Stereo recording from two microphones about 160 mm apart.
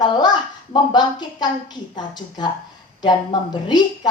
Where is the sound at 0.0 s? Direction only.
25° left (ahead or behind).